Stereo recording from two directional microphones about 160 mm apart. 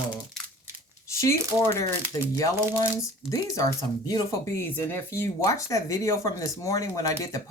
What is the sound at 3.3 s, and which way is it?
Speech, 20° left (ahead or behind).